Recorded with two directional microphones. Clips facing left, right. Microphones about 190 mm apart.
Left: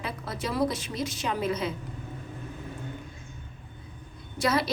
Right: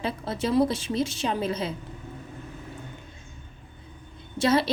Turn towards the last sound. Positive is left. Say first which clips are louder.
# right 4 dB
turn(degrees=-25)  # may be behind; listen again after turning